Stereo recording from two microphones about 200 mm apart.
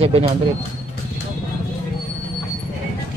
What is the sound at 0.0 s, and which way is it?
Speech, 30° right (ahead or behind).